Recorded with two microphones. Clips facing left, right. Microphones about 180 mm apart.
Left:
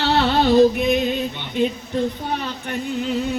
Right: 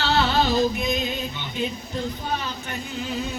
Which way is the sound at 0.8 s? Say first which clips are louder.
Left 7 dB; 65° left (ahead or behind).